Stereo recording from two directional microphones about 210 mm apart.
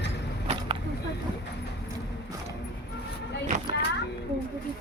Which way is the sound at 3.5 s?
35° right (ahead or behind).